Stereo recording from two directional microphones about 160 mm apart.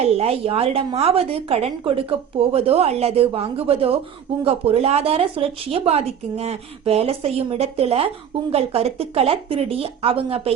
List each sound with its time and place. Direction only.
0.0 s a woman's voice: 40° right (ahead or behind)